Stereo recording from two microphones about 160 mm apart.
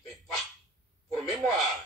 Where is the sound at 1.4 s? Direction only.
Centre (ahead or behind).